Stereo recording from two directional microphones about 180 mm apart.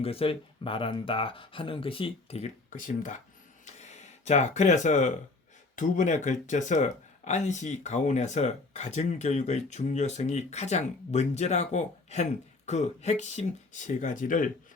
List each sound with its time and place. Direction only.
0.0 s speech: 30° left (ahead or behind); by 14.5 s 45° left (ahead or behind)